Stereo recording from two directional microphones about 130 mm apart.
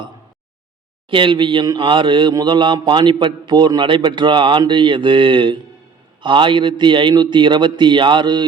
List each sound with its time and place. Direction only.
1.1 s a man's voice: 40° right (ahead or behind)